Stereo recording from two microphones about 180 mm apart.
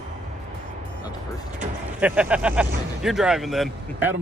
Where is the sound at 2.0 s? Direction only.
5° right (ahead or behind).